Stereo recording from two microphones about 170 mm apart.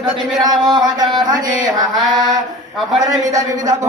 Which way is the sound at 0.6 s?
25° right (ahead or behind).